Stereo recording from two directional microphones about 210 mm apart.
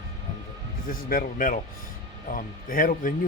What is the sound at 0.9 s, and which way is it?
A man's voice, 40° left (ahead or behind).